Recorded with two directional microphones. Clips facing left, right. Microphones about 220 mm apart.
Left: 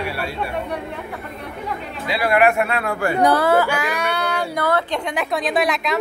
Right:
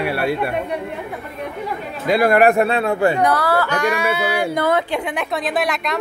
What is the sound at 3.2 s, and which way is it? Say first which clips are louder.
Speech: left 2 dB; 25° left (ahead or behind).